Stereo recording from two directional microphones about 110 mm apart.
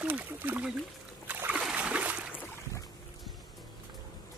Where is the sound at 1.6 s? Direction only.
10° right (ahead or behind).